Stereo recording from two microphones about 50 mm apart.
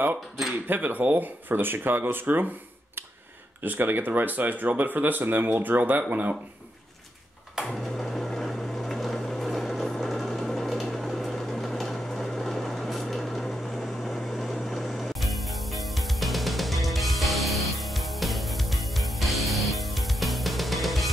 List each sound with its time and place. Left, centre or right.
0.7 s speech: right
3.6 s speech: right
7.6 s a sound: centre